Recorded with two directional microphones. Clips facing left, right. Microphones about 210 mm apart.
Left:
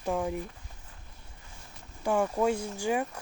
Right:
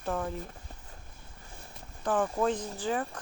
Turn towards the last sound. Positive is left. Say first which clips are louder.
# left 2 dB
turn(degrees=10)  # may be behind; listen again after turning